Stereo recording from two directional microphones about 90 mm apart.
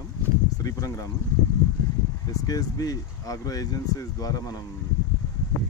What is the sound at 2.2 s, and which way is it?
Speech, 40° left (ahead or behind).